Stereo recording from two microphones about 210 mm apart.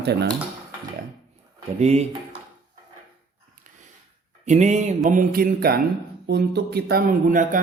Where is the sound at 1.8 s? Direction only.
30° right (ahead or behind).